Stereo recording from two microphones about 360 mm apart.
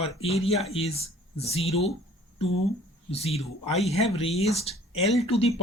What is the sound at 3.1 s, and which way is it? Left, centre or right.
Speech, centre.